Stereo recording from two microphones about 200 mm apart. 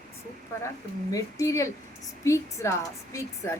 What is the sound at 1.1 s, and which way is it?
Speech, 15° left (ahead or behind).